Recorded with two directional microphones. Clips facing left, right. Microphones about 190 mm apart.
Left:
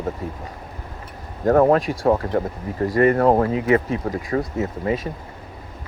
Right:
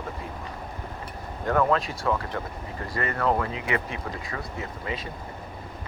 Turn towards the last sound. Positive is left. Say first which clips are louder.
# left 10 dB
turn(degrees=40)  # may be behind; listen again after turning